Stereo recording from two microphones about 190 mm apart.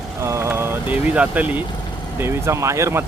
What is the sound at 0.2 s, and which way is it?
Speech, 15° right (ahead or behind).